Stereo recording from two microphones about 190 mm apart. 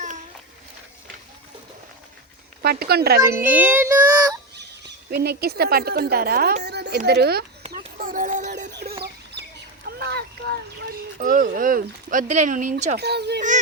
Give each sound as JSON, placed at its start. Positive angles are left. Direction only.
{"t": 2.6, "sound": "speech", "side_deg": -55}
{"t": 3.2, "sound": "child singing", "side_deg": -15}
{"t": 4.5, "sound": "speech", "side_deg": -60}
{"t": 7.7, "sound": "a sound", "side_deg": -45}
{"t": 8.7, "sound": "chicken", "side_deg": -55}
{"t": 9.8, "sound": "boat", "side_deg": -55}
{"t": 11.2, "sound": "speech", "side_deg": -45}
{"t": 13.0, "sound": "speech", "side_deg": -60}